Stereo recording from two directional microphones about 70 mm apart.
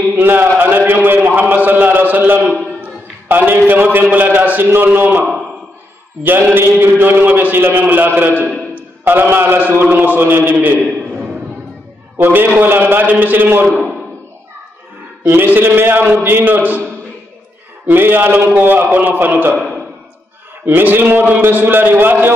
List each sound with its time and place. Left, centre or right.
0.1 s a sound: right
3.3 s a man's voice: right
6.5 s a man's voice: right
12.2 s a man's voice: right
15.2 s a man's voice: right
17.8 s a man's voice: right
20.6 s a man's voice: right